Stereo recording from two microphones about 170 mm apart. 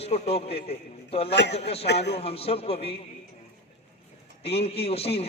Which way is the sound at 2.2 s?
35° left (ahead or behind).